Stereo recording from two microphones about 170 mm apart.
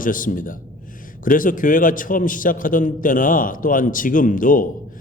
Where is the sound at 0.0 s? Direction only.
55° left (ahead or behind).